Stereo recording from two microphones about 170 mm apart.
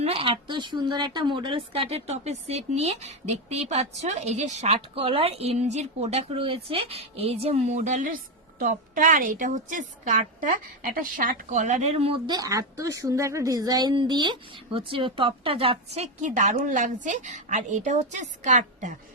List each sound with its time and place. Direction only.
0.0 s speech: 35° right (ahead or behind)